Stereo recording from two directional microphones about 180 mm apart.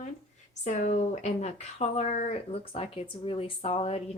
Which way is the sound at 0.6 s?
40° left (ahead or behind).